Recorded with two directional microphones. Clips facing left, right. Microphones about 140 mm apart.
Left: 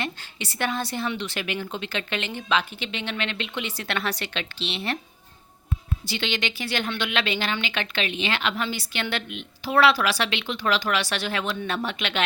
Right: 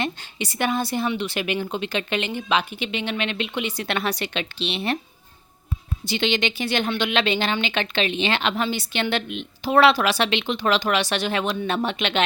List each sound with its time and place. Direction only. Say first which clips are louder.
0.0 s speech: right 4 dB; 20° right (ahead or behind)
6.1 s speech: right 6 dB; 20° right (ahead or behind)